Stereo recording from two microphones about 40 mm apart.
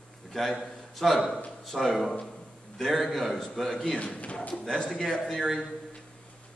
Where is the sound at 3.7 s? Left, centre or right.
Left.